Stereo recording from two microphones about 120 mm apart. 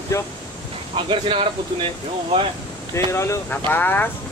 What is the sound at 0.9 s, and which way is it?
Speech, 50° right (ahead or behind).